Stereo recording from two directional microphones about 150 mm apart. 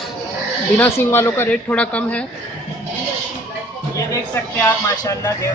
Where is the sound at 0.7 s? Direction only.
15° left (ahead or behind).